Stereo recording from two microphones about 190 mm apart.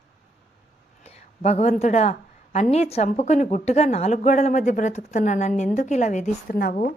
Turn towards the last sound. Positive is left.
turn(degrees=45)  # may be behind; listen again after turning